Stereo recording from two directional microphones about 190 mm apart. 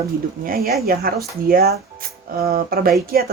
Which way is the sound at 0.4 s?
50° right (ahead or behind).